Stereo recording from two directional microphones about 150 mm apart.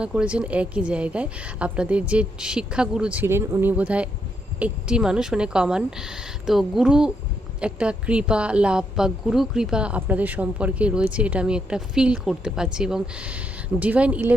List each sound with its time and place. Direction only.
0.0 s a woman's voice: 5° right (ahead or behind)